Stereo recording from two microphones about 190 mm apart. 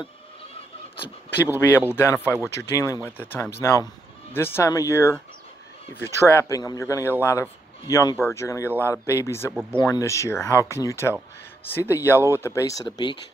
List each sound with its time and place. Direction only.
1.8 s speech: 10° left (ahead or behind)
6.1 s speech: 15° left (ahead or behind)
8.6 s speech: 10° right (ahead or behind)
8.9 s speech: 15° left (ahead or behind)
9.5 s speech: 5° right (ahead or behind)
9.8 s speech: 20° left (ahead or behind)